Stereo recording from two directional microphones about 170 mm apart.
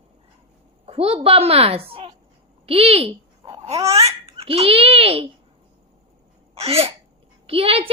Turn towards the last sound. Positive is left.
turn(degrees=-35)  # may be behind; listen again after turning